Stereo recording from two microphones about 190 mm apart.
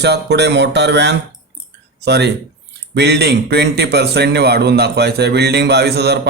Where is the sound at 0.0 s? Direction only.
60° right (ahead or behind).